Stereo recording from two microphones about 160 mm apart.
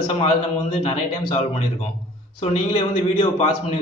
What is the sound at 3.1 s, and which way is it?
Speech, 35° left (ahead or behind).